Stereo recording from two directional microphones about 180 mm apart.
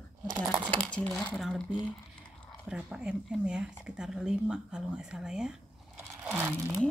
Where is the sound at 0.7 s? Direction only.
5° left (ahead or behind); by 6.8 s 10° right (ahead or behind).